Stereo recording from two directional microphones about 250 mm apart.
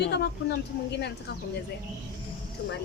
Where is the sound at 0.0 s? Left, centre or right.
Left.